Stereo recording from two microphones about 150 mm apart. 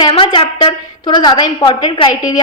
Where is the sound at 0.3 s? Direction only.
35° left (ahead or behind).